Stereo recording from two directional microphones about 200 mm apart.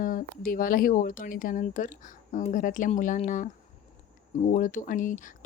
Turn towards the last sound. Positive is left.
turn(degrees=40)  # may be behind; listen again after turning